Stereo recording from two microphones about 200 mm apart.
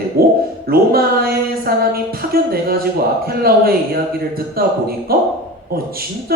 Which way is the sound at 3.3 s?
50° right (ahead or behind).